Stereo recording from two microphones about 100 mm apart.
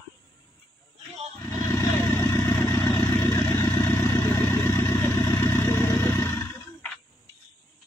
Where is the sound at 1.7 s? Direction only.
35° left (ahead or behind).